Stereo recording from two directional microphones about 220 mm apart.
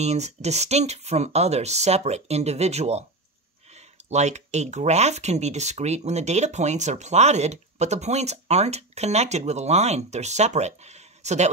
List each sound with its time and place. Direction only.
0.0 s speech: 30° right (ahead or behind)